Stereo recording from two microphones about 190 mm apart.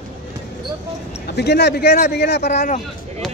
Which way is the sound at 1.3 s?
60° left (ahead or behind).